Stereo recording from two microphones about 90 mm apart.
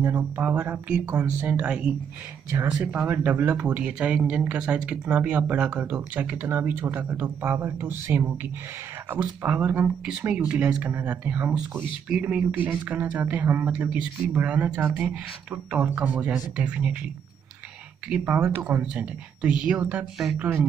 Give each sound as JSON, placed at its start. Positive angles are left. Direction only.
{"t": 0.0, "sound": "speech", "side_deg": -25}
{"t": 18.2, "sound": "speech", "side_deg": -20}